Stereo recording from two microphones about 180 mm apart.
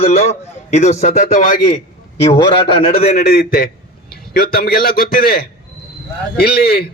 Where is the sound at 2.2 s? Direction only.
30° left (ahead or behind).